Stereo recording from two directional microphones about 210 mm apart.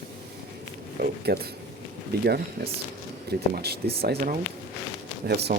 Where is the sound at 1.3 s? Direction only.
50° right (ahead or behind).